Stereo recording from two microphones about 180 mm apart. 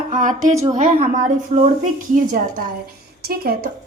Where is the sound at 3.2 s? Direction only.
60° right (ahead or behind).